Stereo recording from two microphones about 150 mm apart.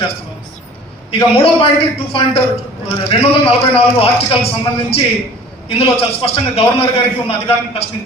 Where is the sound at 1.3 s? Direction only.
40° left (ahead or behind).